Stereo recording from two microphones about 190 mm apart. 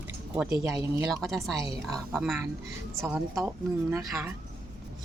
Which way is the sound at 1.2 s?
Centre (ahead or behind).